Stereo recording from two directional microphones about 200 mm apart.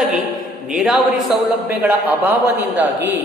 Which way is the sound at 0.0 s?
Centre (ahead or behind).